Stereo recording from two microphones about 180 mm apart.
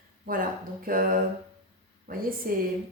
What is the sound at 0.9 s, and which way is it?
A woman's voice, 50° right (ahead or behind).